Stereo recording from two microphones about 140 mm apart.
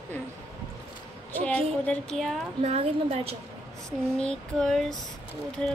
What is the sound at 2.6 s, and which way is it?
Speech, 50° right (ahead or behind).